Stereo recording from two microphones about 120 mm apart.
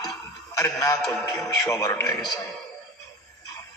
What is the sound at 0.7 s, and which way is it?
Speech, 25° left (ahead or behind).